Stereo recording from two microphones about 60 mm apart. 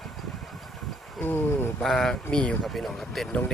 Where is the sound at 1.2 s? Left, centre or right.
Left.